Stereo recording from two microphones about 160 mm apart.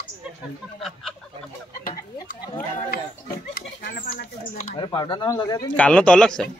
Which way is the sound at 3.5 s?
70° left (ahead or behind).